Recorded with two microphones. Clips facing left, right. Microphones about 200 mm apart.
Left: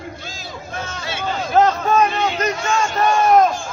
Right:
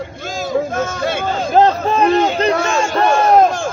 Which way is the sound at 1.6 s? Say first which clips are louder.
Right 2 dB; 30° right (ahead or behind).